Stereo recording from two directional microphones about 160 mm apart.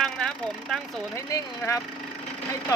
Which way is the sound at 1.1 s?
20° left (ahead or behind).